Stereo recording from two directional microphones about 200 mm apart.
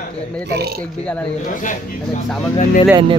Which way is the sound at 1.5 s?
40° left (ahead or behind).